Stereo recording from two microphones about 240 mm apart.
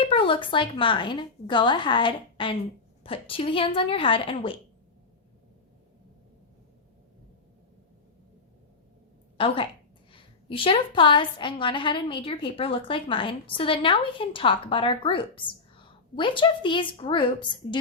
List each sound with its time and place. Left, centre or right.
0.0 s a woman's voice: left
9.4 s a woman's voice: left